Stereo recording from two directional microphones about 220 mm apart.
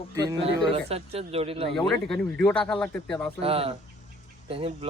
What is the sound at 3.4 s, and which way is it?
Speech, 25° right (ahead or behind).